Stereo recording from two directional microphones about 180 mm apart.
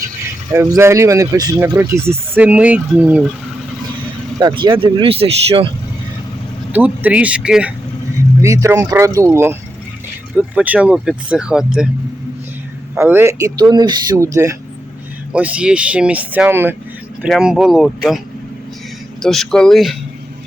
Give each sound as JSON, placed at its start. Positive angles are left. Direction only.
{"t": 0.5, "sound": "speech", "side_deg": -15}
{"t": 4.4, "sound": "speech", "side_deg": -25}
{"t": 6.7, "sound": "speech", "side_deg": -10}
{"t": 8.4, "sound": "speech", "side_deg": -15}
{"t": 13.0, "sound": "speech", "side_deg": -10}
{"t": 15.3, "sound": "speech", "side_deg": -5}
{"t": 19.2, "sound": "speech", "side_deg": 0}